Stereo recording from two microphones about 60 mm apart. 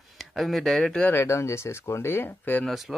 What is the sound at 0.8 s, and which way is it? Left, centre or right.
Speech, left.